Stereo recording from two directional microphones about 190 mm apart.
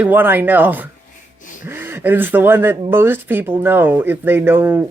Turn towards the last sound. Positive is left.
turn(degrees=-10)  # may be behind; listen again after turning